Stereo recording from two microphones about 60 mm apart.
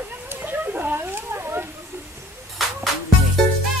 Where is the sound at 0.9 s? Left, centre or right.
Right.